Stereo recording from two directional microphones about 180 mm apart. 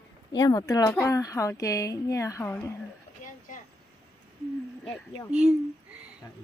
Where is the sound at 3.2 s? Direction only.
45° left (ahead or behind).